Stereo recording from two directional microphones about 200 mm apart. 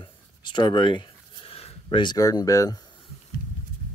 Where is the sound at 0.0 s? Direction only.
20° left (ahead or behind).